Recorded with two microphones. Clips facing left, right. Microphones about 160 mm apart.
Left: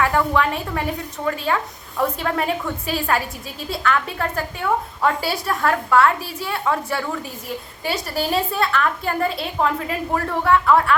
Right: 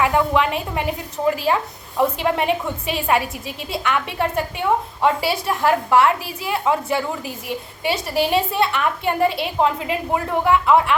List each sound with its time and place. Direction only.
0.0 s a woman's voice: 20° right (ahead or behind)
7.9 s a woman's voice: centre (ahead or behind)
8.5 s a woman's voice: 25° right (ahead or behind)